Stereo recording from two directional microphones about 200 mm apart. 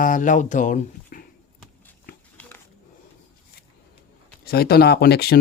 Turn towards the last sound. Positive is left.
turn(degrees=55)  # may be behind; listen again after turning